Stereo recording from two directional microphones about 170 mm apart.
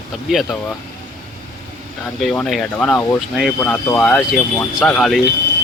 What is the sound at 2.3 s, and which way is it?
Speech, 5° left (ahead or behind).